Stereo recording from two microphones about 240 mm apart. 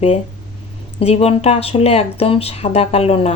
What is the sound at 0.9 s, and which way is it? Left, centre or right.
Speech, left.